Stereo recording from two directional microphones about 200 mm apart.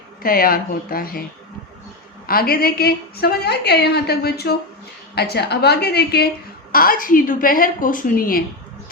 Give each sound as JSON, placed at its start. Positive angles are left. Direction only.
{"t": 0.2, "sound": "a woman's voice", "side_deg": 45}
{"t": 2.2, "sound": "a woman's voice", "side_deg": 50}